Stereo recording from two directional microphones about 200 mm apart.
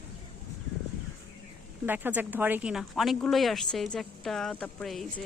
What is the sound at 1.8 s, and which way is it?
Speech, 10° right (ahead or behind).